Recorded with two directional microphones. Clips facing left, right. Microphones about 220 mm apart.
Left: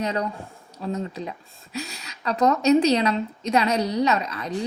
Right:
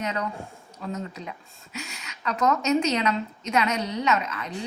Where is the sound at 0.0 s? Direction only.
35° left (ahead or behind).